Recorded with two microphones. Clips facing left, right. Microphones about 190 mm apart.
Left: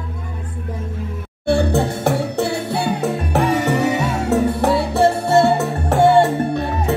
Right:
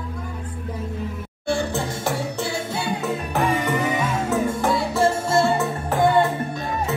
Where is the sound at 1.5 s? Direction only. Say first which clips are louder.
Left 7 dB; 60° left (ahead or behind).